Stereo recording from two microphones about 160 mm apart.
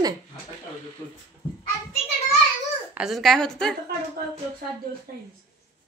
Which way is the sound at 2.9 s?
Centre (ahead or behind).